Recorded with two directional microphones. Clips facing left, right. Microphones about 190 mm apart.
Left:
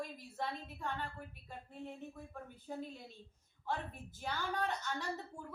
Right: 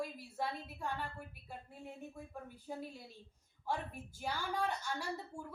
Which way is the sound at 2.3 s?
10° right (ahead or behind).